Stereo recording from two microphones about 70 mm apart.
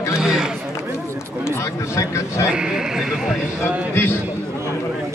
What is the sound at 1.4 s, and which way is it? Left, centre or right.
Speech, left.